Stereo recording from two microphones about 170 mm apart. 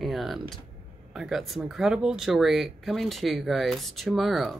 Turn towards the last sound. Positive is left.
turn(degrees=0)  # may be behind; listen again after turning